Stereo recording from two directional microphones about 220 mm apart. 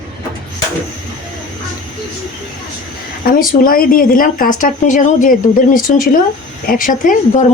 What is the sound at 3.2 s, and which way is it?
Speech, 40° left (ahead or behind).